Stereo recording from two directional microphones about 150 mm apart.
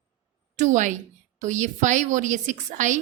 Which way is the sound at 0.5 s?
55° right (ahead or behind).